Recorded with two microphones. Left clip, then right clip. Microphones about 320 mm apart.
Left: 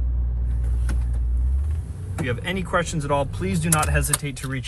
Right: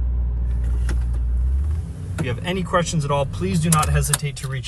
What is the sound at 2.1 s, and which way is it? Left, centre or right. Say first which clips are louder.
Speech: right 1 dB; centre.